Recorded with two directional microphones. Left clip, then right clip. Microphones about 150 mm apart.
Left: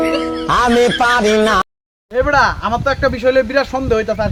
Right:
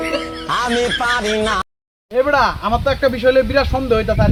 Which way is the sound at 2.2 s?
5° left (ahead or behind).